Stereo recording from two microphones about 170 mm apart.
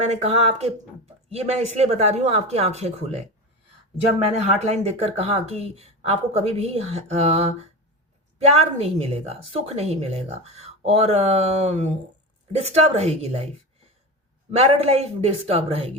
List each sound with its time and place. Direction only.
0.0 s a woman's voice: 40° right (ahead or behind)
4.5 s a woman's voice: 40° right (ahead or behind)
14.5 s a woman's voice: 40° right (ahead or behind)